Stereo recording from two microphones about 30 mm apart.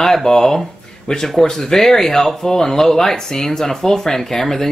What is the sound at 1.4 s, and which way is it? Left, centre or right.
Speech, centre.